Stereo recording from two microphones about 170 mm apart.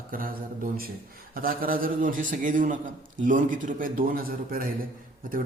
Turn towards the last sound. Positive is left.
turn(degrees=-55)  # may be behind; listen again after turning